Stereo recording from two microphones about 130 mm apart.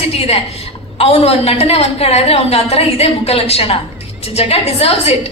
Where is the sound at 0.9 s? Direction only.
50° left (ahead or behind).